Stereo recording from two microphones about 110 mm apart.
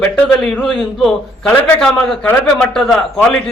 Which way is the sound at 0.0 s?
5° left (ahead or behind).